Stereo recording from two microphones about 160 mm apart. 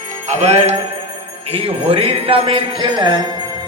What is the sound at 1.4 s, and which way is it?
Speech, 35° right (ahead or behind).